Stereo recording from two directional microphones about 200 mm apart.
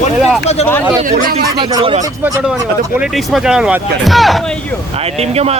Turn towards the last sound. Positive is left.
turn(degrees=-30)  # may be behind; listen again after turning